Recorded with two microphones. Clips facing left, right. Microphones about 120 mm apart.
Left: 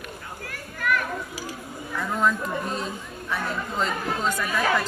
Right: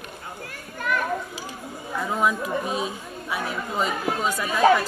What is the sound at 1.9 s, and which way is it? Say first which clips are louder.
Speech: right 2 dB; 20° right (ahead or behind).